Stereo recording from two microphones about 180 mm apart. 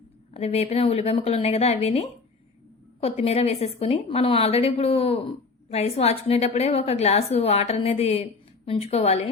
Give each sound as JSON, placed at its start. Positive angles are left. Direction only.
{"t": 0.3, "sound": "a woman's voice", "side_deg": 35}